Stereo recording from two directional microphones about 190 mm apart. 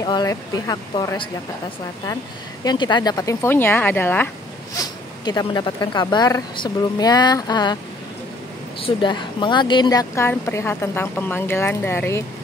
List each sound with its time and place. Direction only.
0.0 s speech: 20° left (ahead or behind)
2.6 s a woman's voice: 25° left (ahead or behind)
4.7 s speech: 20° left (ahead or behind)
8.8 s a woman's voice: 25° left (ahead or behind)